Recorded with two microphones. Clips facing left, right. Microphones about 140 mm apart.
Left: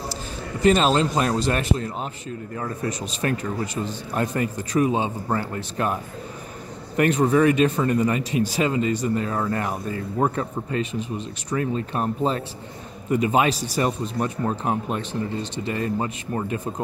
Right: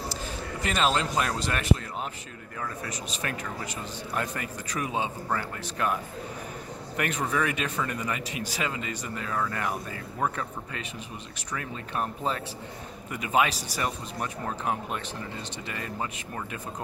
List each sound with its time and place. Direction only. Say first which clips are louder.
0.1 s a man's voice: left 3 dB; 30° left (ahead or behind)
7.0 s speech: left 10 dB; 30° left (ahead or behind)